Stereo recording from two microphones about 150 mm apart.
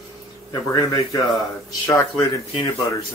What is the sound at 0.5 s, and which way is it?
Speech, 25° left (ahead or behind).